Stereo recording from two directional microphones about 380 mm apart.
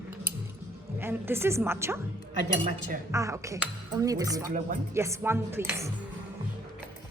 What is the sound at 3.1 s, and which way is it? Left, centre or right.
Speech, centre.